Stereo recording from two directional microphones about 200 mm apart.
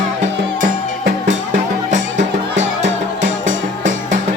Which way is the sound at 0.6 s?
40° right (ahead or behind).